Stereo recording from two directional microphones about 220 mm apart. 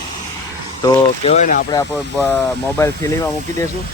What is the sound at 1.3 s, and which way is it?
Speech, 35° left (ahead or behind).